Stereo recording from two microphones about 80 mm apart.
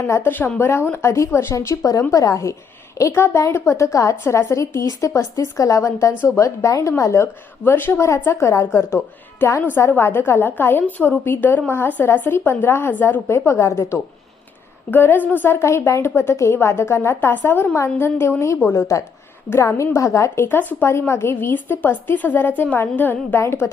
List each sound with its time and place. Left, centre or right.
0.2 s a woman's voice: left
14.8 s a woman's voice: left